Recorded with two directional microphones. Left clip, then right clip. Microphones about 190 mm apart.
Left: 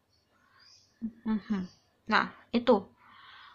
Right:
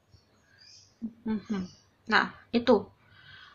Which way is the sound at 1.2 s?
35° left (ahead or behind).